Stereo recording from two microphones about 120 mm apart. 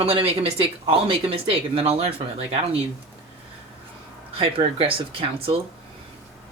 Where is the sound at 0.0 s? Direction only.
55° right (ahead or behind).